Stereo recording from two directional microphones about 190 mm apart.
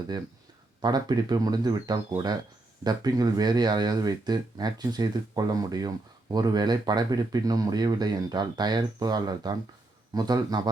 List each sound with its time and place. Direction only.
0.8 s speech: 20° right (ahead or behind)